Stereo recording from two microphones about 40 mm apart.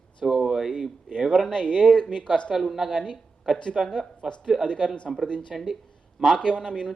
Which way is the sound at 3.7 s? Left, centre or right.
Centre.